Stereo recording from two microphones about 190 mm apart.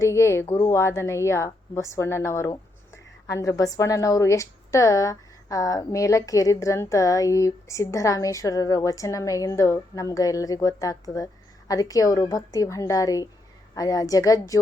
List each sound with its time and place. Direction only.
0.0 s a woman's voice: 15° left (ahead or behind)